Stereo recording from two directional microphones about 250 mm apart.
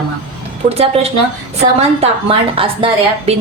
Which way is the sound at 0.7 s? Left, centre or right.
Right.